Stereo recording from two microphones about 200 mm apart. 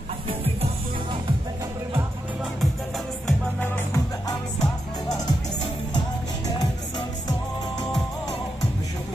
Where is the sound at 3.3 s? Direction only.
10° left (ahead or behind).